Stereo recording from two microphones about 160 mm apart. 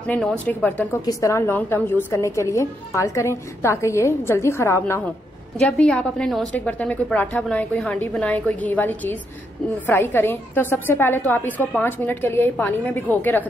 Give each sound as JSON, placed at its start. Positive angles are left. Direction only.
{"t": 0.0, "sound": "a woman's voice", "side_deg": 10}